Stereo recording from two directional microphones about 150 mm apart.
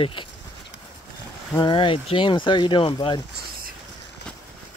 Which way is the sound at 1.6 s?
35° left (ahead or behind).